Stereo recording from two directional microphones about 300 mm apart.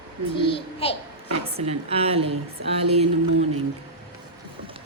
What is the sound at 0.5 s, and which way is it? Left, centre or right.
Speech, centre.